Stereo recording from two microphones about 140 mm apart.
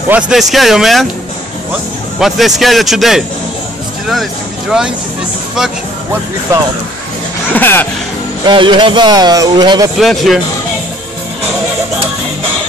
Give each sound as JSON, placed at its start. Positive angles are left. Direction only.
{"t": 0.1, "sound": "a man's voice", "side_deg": -5}
{"t": 2.1, "sound": "a man's voice", "side_deg": 0}
{"t": 6.5, "sound": "speech", "side_deg": -20}
{"t": 7.5, "sound": "speech", "side_deg": 15}
{"t": 8.5, "sound": "speech", "side_deg": -35}
{"t": 9.9, "sound": "a man's voice", "side_deg": 0}